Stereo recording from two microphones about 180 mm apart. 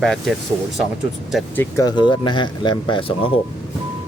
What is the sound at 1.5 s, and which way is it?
Speech, 20° left (ahead or behind).